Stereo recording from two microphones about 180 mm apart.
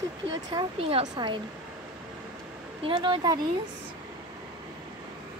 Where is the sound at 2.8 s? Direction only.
25° right (ahead or behind).